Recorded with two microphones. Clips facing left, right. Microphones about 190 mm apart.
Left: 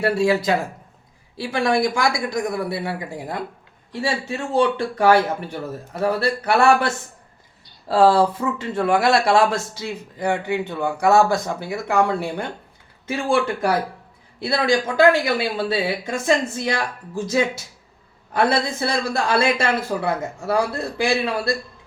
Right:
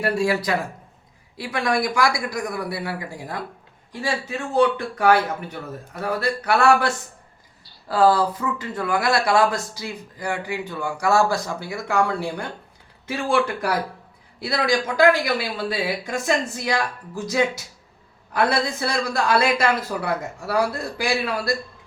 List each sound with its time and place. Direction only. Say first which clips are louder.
0.0 s speech: left 3 dB; 25° left (ahead or behind)